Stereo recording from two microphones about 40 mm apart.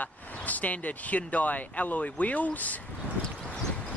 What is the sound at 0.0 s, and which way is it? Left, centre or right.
Speech, left.